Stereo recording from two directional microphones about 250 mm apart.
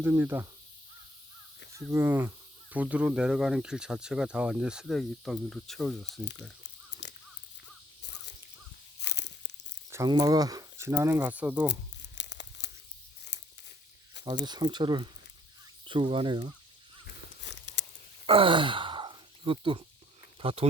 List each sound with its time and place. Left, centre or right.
0.0 s speech: centre
1.9 s speech: centre
7.0 s crow: left
9.0 s crunch: left
9.9 s speech: centre
11.7 s crumpling: left
13.3 s tearing: left
14.4 s speech: centre
18.3 s sigh: right
20.4 s speech: right